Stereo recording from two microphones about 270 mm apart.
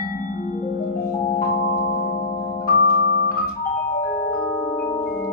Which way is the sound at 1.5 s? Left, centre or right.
Left.